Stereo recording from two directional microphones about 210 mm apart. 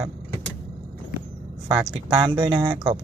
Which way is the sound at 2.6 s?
25° right (ahead or behind).